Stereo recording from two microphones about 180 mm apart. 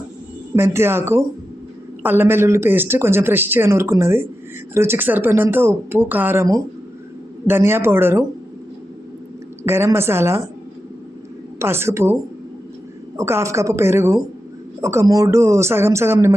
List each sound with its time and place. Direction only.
0.5 s speech: 15° right (ahead or behind)
9.6 s speech: 15° right (ahead or behind)
11.6 s speech: 15° right (ahead or behind)
13.1 s speech: 15° right (ahead or behind)